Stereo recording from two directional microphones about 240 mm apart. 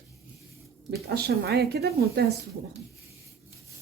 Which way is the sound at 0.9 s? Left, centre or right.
Right.